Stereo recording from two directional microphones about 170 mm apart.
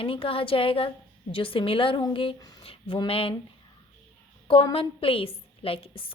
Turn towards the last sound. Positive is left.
turn(degrees=30)  # may be behind; listen again after turning